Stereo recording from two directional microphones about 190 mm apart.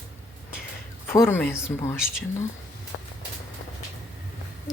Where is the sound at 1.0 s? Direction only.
15° left (ahead or behind).